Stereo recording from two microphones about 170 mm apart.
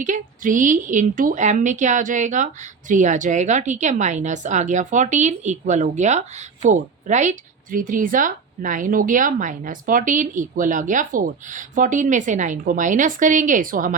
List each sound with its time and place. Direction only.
0.0 s a woman's voice: 50° right (ahead or behind)